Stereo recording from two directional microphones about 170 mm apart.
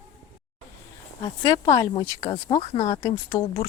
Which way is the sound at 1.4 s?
20° left (ahead or behind).